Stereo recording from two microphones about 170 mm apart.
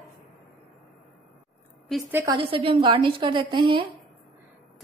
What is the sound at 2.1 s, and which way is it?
Speech, 15° right (ahead or behind).